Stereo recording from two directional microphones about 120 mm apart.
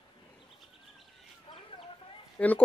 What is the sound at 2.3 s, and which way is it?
Speech, 15° left (ahead or behind).